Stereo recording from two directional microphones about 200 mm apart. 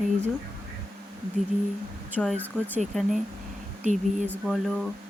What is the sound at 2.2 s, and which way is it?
Speech, 5° left (ahead or behind).